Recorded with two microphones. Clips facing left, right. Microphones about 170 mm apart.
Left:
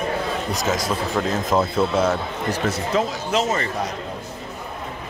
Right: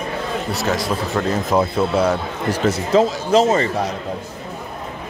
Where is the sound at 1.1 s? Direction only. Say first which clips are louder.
Right 3 dB; 10° right (ahead or behind).